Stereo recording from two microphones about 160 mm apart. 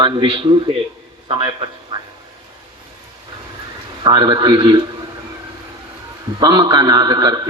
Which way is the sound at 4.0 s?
30° right (ahead or behind).